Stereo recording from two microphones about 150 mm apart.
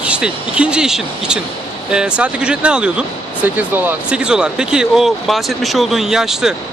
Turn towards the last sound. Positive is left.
turn(degrees=-5)  # may be behind; listen again after turning